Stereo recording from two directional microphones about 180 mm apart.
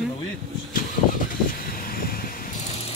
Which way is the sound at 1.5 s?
55° left (ahead or behind).